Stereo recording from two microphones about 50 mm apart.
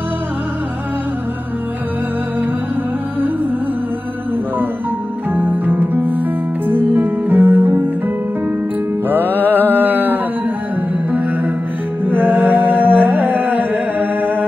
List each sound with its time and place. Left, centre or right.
5.3 s music: right
9.1 s mantra: right
11.1 s music: right